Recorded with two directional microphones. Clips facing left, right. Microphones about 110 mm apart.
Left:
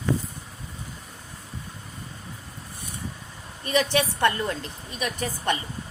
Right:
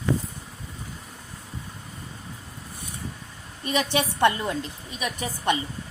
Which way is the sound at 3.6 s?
15° right (ahead or behind).